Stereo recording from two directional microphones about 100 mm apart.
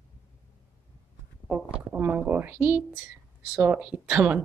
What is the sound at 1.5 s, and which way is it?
A woman's voice, 15° right (ahead or behind).